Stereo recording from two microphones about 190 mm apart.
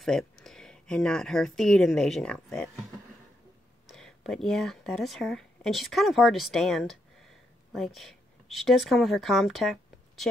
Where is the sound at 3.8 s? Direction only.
Centre (ahead or behind).